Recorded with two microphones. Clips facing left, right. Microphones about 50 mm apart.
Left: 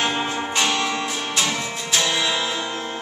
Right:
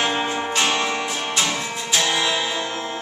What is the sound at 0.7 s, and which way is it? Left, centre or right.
Music, centre.